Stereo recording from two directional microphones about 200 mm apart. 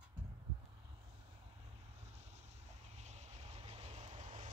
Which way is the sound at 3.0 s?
35° right (ahead or behind).